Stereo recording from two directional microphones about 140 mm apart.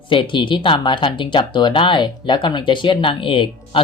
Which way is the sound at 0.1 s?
35° left (ahead or behind).